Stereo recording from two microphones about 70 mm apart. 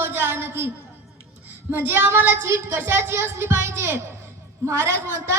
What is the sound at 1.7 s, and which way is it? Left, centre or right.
A woman's voice, right.